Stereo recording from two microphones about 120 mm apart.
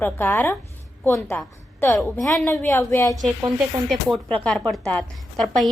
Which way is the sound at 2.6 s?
20° left (ahead or behind).